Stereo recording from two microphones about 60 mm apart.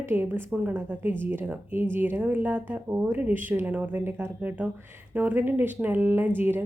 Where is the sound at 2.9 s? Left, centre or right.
Right.